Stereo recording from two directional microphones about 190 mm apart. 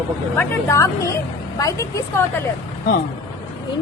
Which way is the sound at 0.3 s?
15° left (ahead or behind).